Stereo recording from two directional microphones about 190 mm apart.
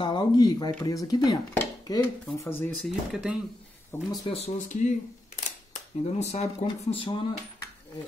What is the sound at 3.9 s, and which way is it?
Speech, 15° left (ahead or behind).